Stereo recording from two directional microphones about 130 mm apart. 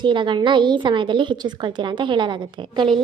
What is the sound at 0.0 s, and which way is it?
A woman's voice, 35° right (ahead or behind).